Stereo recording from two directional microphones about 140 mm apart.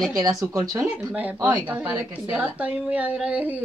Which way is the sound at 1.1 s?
10° right (ahead or behind).